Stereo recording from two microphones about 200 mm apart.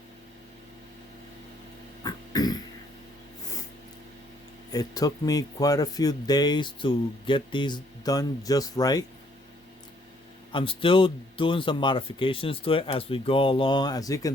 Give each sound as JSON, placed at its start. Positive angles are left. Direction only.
{"t": 2.0, "sound": "a sound", "side_deg": 20}
{"t": 4.7, "sound": "speech", "side_deg": 20}
{"t": 10.5, "sound": "speech", "side_deg": 25}